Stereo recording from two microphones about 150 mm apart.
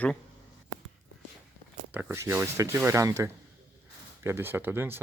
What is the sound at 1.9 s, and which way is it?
Speech, 15° right (ahead or behind).